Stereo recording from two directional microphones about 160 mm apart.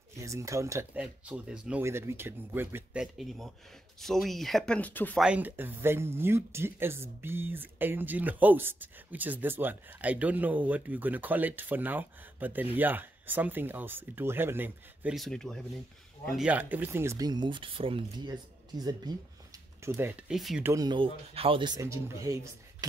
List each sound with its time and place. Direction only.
0.2 s speech: 20° right (ahead or behind)
1.0 s speech: 5° right (ahead or behind); by 5.2 s 10° left (ahead or behind)
5.2 s speech: 10° right (ahead or behind)
15.1 s speech: centre (ahead or behind)
16.3 s speech: 10° right (ahead or behind); by 19.1 s 25° right (ahead or behind)
19.8 s speech: 15° right (ahead or behind)
20.6 s speech: 20° right (ahead or behind)